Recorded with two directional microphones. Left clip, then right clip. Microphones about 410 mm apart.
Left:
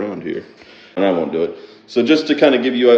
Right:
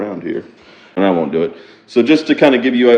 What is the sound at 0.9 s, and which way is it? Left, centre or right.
A man's voice, centre.